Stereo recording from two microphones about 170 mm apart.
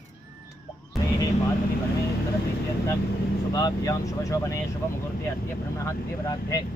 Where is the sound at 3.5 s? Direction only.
20° left (ahead or behind).